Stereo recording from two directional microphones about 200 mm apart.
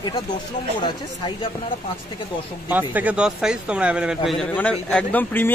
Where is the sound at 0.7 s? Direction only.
20° left (ahead or behind).